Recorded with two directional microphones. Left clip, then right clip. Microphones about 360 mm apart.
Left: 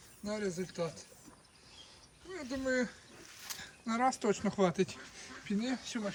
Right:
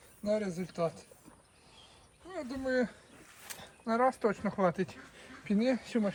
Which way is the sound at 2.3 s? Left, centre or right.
Centre.